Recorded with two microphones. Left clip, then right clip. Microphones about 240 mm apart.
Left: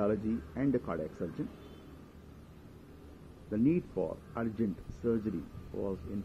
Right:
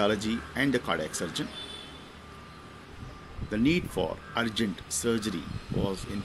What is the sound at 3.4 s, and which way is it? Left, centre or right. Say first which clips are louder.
Speech: right 4 dB; centre.